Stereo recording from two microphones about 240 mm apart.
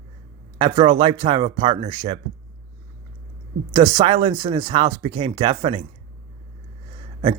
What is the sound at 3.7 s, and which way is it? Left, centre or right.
Speech, centre.